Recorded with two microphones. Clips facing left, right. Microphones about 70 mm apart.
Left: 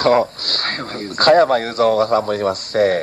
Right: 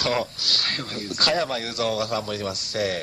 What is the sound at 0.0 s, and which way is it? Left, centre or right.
Speech, left.